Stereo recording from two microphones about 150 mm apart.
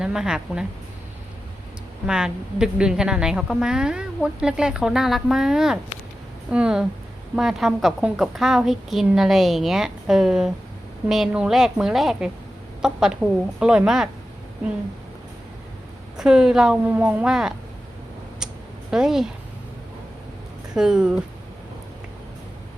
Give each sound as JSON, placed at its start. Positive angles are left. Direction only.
{"t": 0.0, "sound": "a woman's voice", "side_deg": -5}
{"t": 2.0, "sound": "a woman's voice", "side_deg": -5}
{"t": 16.1, "sound": "a woman's voice", "side_deg": -5}
{"t": 18.9, "sound": "a woman's voice", "side_deg": -5}
{"t": 20.7, "sound": "a woman's voice", "side_deg": -5}